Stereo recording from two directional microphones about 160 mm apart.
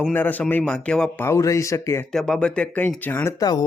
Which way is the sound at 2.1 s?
5° left (ahead or behind).